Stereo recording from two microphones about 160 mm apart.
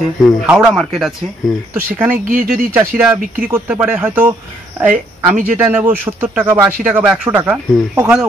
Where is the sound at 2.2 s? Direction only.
60° right (ahead or behind).